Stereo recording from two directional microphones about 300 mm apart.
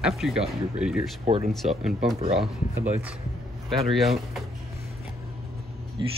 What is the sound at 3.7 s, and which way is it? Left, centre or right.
Speech, centre.